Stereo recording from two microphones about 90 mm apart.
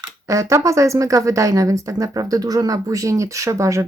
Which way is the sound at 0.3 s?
35° right (ahead or behind).